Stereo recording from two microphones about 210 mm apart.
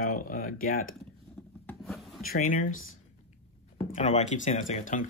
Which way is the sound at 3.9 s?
30° left (ahead or behind).